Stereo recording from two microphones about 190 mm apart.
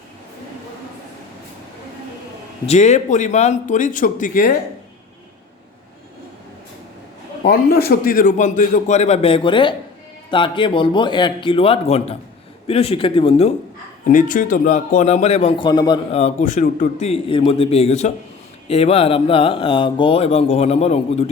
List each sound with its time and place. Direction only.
2.6 s speech: 35° left (ahead or behind)
7.4 s speech: 55° left (ahead or behind); by 13.5 s 30° left (ahead or behind)
14.1 s speech: 45° left (ahead or behind); by 16.0 s 20° left (ahead or behind)
16.1 s speech: 40° left (ahead or behind)